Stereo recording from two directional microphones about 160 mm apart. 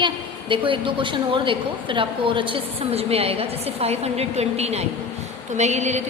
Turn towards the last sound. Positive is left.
turn(degrees=-45)  # may be behind; listen again after turning